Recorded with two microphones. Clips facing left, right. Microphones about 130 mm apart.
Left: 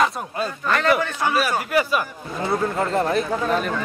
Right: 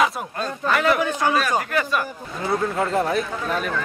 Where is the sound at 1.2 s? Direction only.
10° left (ahead or behind).